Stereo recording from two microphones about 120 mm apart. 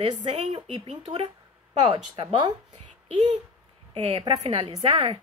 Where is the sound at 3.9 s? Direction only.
50° right (ahead or behind).